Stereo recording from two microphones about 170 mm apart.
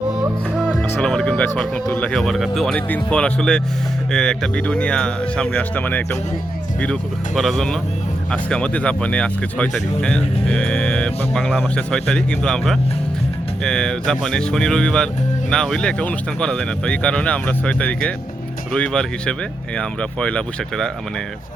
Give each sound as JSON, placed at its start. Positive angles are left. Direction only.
{"t": 0.5, "sound": "music", "side_deg": -5}
{"t": 0.8, "sound": "speech", "side_deg": 5}